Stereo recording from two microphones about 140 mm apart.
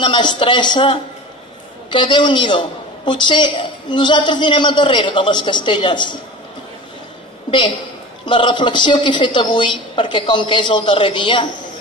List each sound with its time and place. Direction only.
0.0 s a woman's voice: 35° left (ahead or behind)
8.3 s a woman's voice: 35° left (ahead or behind)